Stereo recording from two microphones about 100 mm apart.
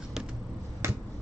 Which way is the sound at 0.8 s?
25° right (ahead or behind).